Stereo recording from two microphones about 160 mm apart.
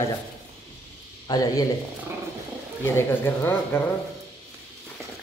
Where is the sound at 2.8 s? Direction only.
15° left (ahead or behind).